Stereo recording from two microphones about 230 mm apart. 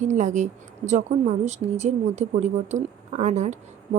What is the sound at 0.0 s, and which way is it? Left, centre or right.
Speech, right.